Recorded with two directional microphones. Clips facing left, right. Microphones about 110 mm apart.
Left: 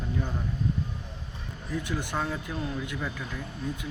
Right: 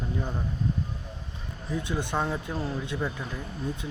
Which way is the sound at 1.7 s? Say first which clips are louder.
Right 2 dB; 20° right (ahead or behind).